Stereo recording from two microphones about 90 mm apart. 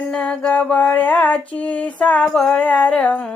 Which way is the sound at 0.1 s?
10° left (ahead or behind).